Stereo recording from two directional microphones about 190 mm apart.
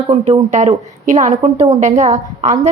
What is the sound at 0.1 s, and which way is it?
A woman's voice, 35° right (ahead or behind).